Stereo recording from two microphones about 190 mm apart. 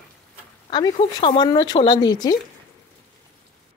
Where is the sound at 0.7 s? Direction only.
20° left (ahead or behind).